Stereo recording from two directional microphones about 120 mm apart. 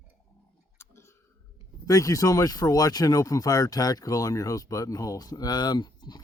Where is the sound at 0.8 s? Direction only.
20° left (ahead or behind).